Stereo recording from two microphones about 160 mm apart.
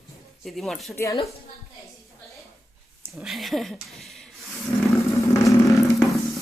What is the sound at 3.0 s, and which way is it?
Speech, 5° right (ahead or behind).